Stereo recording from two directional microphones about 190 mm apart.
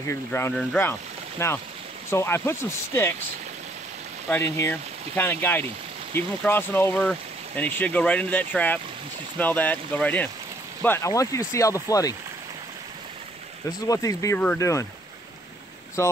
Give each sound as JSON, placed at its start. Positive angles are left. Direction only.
{"t": 0.0, "sound": "speech", "side_deg": 15}
{"t": 4.3, "sound": "speech", "side_deg": 10}
{"t": 13.7, "sound": "speech", "side_deg": 20}
{"t": 16.0, "sound": "speech", "side_deg": 15}